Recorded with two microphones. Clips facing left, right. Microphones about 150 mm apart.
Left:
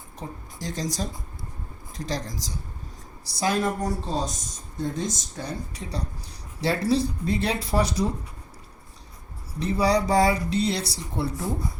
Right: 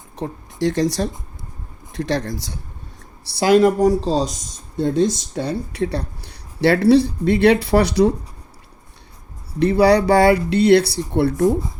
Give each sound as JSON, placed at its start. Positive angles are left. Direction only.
{"t": 0.2, "sound": "speech", "side_deg": -70}
{"t": 3.3, "sound": "speech", "side_deg": -80}
{"t": 9.6, "sound": "speech", "side_deg": -70}